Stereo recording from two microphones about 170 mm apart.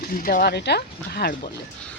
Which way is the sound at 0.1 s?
55° left (ahead or behind).